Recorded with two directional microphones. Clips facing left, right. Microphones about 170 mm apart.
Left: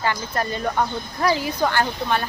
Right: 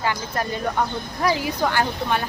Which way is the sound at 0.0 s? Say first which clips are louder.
Left 1 dB; 10° right (ahead or behind).